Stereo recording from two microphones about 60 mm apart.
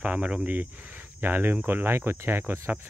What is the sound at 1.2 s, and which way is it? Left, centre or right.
Speech, right.